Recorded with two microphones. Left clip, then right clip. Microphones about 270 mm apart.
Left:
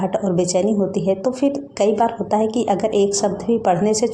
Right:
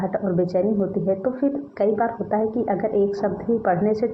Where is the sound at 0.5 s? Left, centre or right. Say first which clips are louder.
Left 3 dB; left.